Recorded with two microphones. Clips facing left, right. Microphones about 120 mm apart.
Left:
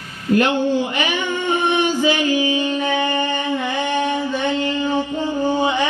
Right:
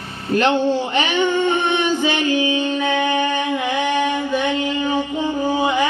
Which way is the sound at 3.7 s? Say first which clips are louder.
Right 2 dB; 5° right (ahead or behind).